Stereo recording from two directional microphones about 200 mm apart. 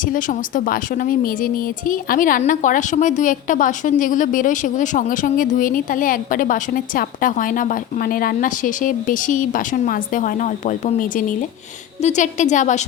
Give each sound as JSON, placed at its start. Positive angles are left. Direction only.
{"t": 0.0, "sound": "a woman's voice", "side_deg": 40}